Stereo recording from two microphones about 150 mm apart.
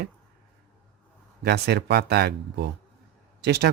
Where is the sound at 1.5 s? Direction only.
90° right.